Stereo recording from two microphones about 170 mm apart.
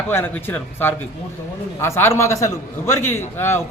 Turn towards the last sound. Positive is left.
turn(degrees=15)  # may be behind; listen again after turning